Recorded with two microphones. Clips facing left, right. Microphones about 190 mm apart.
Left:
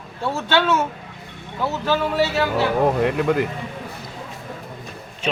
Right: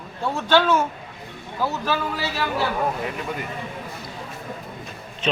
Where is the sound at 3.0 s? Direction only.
85° left.